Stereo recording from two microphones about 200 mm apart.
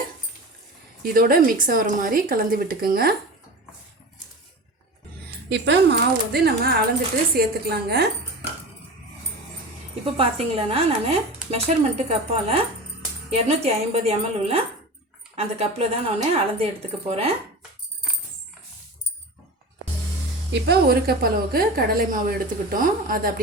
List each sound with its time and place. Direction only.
1.0 s a woman's voice: 45° right (ahead or behind)
5.5 s a woman's voice: 60° right (ahead or behind)
10.2 s speech: 30° right (ahead or behind)
20.5 s a woman's voice: 55° right (ahead or behind)